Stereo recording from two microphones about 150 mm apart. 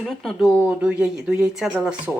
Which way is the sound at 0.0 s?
Centre (ahead or behind).